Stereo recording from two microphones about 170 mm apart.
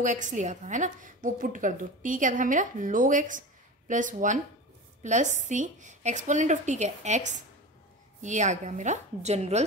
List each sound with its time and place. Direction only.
0.0 s a woman's voice: 45° right (ahead or behind)